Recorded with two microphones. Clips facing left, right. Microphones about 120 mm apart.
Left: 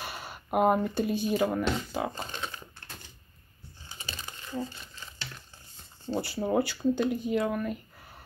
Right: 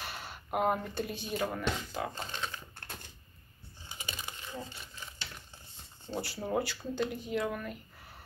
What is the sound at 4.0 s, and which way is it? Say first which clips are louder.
Crumpling: even; 15° right (ahead or behind).